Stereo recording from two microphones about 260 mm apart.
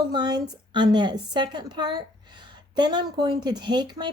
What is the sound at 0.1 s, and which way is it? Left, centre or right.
A woman's voice, centre.